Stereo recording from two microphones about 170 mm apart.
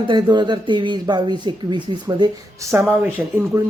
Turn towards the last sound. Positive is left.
turn(degrees=-15)  # may be behind; listen again after turning